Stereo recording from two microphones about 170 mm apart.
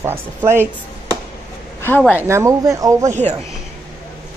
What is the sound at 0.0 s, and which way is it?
Speech, 15° right (ahead or behind).